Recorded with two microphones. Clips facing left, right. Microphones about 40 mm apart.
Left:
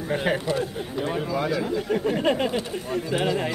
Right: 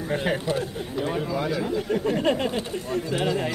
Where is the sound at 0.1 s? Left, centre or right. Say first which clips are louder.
Left 1 dB; centre.